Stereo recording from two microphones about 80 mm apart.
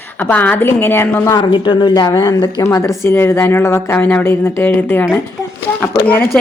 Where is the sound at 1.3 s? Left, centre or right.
Left.